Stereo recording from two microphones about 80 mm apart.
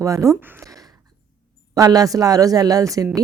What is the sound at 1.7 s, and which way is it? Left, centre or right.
Speech, right.